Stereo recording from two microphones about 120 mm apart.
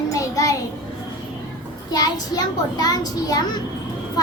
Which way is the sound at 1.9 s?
30° left (ahead or behind).